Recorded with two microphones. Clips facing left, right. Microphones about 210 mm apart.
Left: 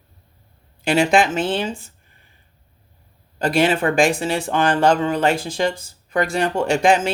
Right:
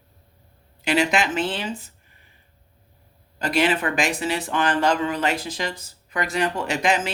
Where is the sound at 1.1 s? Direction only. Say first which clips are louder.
Left 6 dB; 50° left (ahead or behind).